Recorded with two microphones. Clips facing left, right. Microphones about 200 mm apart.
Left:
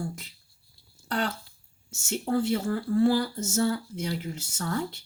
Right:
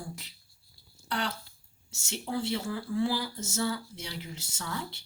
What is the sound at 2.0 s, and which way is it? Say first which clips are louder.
Speech: left 6 dB; 45° left (ahead or behind).